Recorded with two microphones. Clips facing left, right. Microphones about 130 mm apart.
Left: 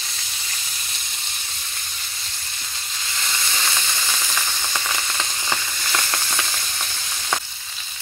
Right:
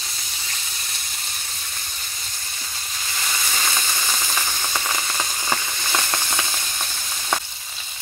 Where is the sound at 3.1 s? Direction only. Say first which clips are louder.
Right 1 dB; 10° right (ahead or behind).